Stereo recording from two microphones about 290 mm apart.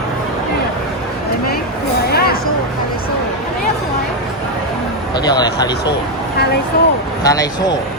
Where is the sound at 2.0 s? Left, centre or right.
Left.